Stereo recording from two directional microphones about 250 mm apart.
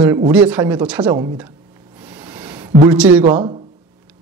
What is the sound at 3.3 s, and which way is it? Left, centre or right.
Speech, centre.